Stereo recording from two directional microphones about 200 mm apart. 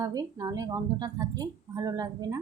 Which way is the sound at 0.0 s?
20° right (ahead or behind).